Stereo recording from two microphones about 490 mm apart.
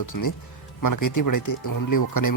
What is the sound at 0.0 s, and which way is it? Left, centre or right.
Speech, left.